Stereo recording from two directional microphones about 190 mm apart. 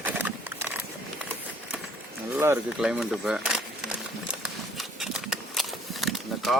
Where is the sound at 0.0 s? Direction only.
10° right (ahead or behind).